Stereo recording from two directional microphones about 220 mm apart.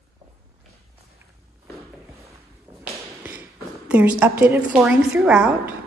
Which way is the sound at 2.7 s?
15° right (ahead or behind).